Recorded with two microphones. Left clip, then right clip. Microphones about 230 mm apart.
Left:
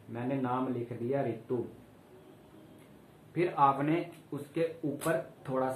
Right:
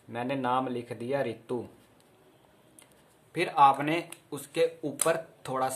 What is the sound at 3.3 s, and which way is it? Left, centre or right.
Speech, right.